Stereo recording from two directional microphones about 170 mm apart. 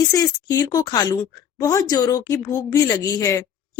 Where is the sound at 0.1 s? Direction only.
20° left (ahead or behind).